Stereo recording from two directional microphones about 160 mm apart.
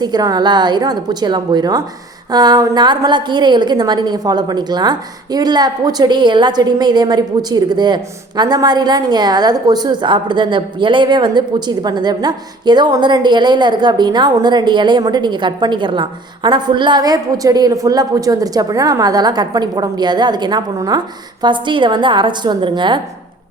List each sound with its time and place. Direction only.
0.0 s a woman's voice: 25° right (ahead or behind)